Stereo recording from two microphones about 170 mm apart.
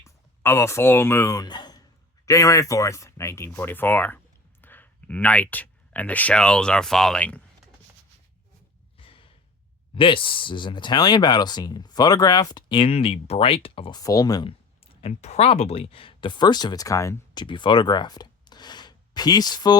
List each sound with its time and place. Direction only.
0.0 s speech: 15° left (ahead or behind)
9.0 s sigh: 30° left (ahead or behind)
9.9 s speech: 30° left (ahead or behind)
14.0 s speech: 20° left (ahead or behind)
15.0 s speech: 40° left (ahead or behind)